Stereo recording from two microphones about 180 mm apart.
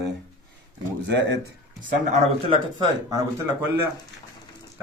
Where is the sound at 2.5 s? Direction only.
25° right (ahead or behind).